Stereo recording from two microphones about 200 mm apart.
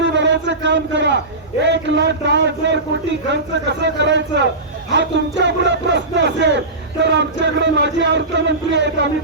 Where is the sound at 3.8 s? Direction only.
60° right (ahead or behind).